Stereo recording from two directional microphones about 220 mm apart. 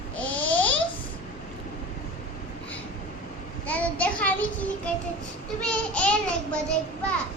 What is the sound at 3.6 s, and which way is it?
Child singing, 5° left (ahead or behind).